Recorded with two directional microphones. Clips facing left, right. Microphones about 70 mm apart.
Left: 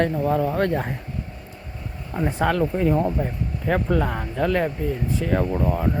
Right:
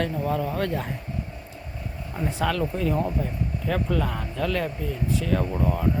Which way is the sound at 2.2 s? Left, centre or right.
Left.